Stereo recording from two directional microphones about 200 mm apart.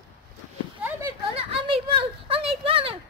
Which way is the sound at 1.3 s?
30° right (ahead or behind).